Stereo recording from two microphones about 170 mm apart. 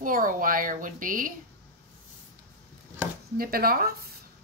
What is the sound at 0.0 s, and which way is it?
A woman's voice, 55° right (ahead or behind).